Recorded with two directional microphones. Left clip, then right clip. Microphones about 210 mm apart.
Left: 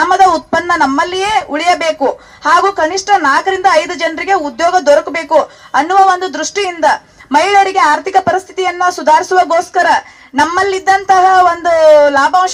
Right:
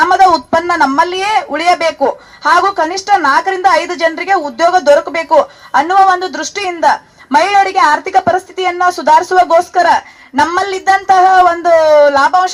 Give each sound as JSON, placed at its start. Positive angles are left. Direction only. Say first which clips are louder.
{"t": 0.0, "sound": "speech", "louder": "right 1 dB", "side_deg": -25}